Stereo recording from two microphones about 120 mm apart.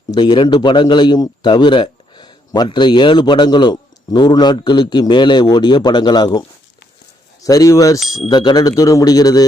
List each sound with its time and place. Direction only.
0.1 s a man's voice: 40° left (ahead or behind)
7.4 s a man's voice: 30° left (ahead or behind)